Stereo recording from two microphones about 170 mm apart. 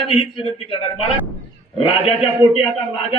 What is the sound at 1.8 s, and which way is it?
Speech, 35° left (ahead or behind).